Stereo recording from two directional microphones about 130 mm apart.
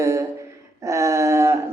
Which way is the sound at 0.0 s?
25° right (ahead or behind).